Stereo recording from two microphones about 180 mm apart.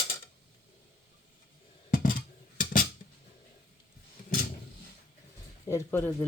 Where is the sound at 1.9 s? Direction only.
50° left (ahead or behind).